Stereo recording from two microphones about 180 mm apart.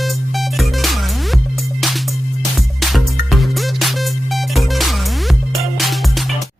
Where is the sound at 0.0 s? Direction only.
Centre (ahead or behind).